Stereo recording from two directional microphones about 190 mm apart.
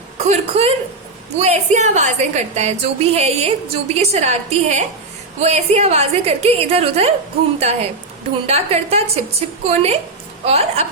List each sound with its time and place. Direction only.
0.2 s a woman's voice: 35° right (ahead or behind)